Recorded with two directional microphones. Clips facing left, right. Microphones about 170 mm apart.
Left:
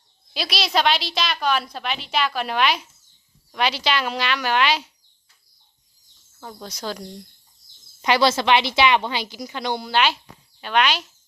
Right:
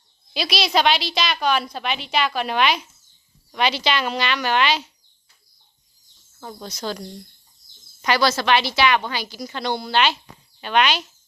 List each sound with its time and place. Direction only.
0.3 s a woman's voice: centre (ahead or behind)
6.4 s speech: centre (ahead or behind)
6.7 s speech: 10° left (ahead or behind)
8.0 s a woman's voice: 20° left (ahead or behind); by 11.0 s centre (ahead or behind)